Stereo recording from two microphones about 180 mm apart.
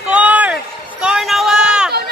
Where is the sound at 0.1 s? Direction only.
10° right (ahead or behind).